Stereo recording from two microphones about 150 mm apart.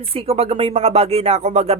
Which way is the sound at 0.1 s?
40° right (ahead or behind).